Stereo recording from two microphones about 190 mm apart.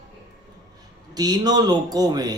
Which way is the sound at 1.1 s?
20° right (ahead or behind).